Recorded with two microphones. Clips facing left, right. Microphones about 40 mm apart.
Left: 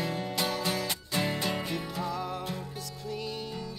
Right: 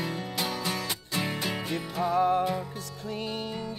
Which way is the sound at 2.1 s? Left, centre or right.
Right.